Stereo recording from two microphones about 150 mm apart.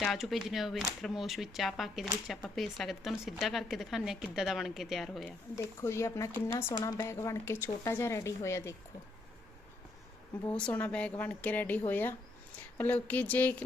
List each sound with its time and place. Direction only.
0.0 s a woman's voice: centre (ahead or behind)
5.5 s speech: 20° left (ahead or behind)
10.5 s a woman's voice: 10° left (ahead or behind)